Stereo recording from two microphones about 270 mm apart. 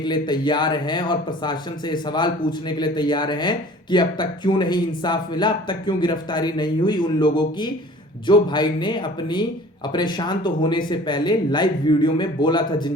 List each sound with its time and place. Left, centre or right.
0.0 s a man's voice: centre